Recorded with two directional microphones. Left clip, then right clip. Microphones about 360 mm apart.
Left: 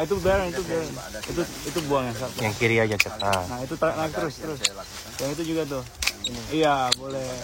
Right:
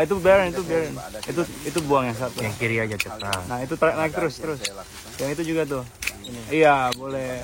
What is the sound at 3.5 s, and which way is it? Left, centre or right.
Speech, right.